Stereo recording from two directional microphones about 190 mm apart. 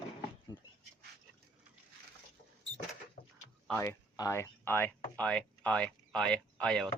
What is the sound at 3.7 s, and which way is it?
Speech, 15° left (ahead or behind).